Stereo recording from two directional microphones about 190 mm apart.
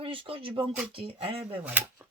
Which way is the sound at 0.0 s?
30° right (ahead or behind).